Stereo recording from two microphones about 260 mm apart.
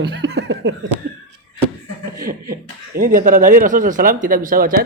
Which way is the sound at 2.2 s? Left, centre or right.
Right.